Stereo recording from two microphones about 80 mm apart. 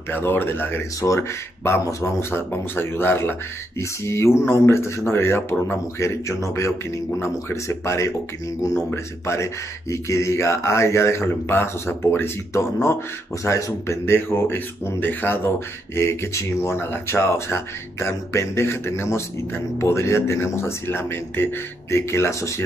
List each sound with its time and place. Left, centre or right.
0.1 s speech: left
1.0 s speech: left
13.4 s speech: left